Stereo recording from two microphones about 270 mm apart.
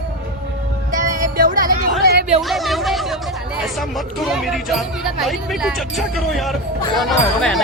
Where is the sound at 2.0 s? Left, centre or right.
Right.